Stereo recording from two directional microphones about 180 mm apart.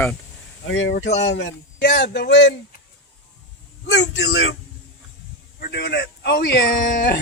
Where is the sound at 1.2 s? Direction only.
75° left (ahead or behind).